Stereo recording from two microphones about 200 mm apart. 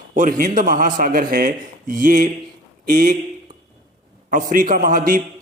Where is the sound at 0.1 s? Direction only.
40° right (ahead or behind).